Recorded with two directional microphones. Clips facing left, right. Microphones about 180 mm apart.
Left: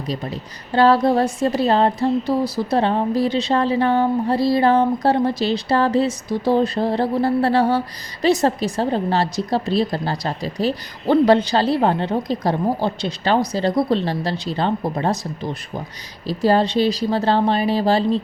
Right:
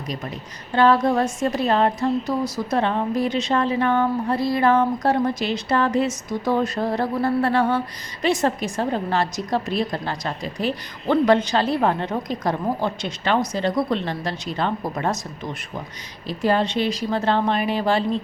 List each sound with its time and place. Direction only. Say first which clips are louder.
0.1 s a woman's voice: left 4 dB; 30° left (ahead or behind)